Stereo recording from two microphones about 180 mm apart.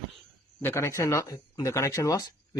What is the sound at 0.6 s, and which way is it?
Speech, 15° left (ahead or behind).